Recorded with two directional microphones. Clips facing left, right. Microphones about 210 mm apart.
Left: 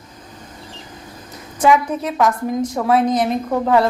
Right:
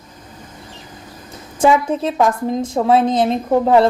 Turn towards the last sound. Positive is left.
turn(degrees=-25)  # may be behind; listen again after turning